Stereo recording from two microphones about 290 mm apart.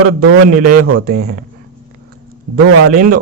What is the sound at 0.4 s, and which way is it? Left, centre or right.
Speech, right.